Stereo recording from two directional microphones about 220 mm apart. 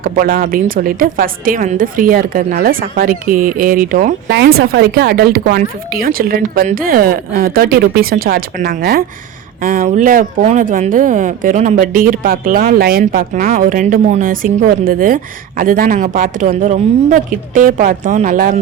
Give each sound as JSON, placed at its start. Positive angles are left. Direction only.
{"t": 0.0, "sound": "a woman's voice", "side_deg": -40}